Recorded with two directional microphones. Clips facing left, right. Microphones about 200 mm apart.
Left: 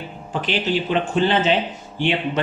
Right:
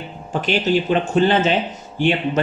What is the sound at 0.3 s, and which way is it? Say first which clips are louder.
A man's voice: right 4 dB; 45° right (ahead or behind).